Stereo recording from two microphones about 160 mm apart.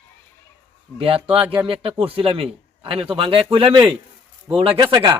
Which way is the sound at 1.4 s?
10° right (ahead or behind).